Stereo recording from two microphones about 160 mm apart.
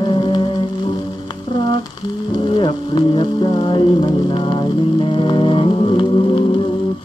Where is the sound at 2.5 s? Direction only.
30° left (ahead or behind).